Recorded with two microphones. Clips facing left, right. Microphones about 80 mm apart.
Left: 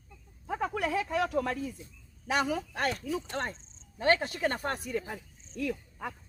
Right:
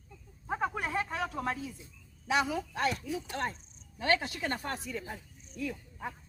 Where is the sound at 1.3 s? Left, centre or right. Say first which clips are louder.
Left 4 dB; left.